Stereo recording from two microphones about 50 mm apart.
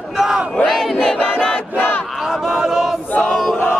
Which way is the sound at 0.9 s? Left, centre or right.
Centre.